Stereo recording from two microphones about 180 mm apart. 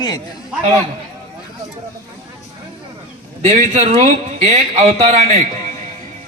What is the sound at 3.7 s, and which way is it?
A man's voice, 40° right (ahead or behind).